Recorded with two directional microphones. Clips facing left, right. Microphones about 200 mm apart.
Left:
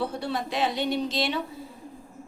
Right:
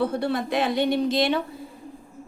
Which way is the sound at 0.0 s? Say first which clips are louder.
Right 5 dB; 55° right (ahead or behind).